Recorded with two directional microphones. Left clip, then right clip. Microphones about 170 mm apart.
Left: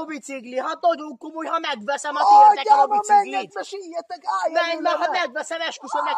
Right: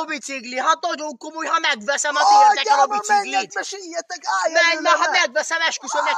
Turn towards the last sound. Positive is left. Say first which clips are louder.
# right 4 dB
turn(degrees=-5)  # may be behind; listen again after turning